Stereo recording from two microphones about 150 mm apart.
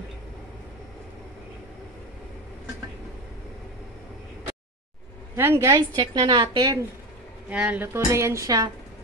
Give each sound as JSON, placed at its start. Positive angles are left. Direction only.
{"t": 5.3, "sound": "a woman's voice", "side_deg": -15}
{"t": 5.8, "sound": "a woman's voice", "side_deg": -30}
{"t": 7.4, "sound": "a woman's voice", "side_deg": -10}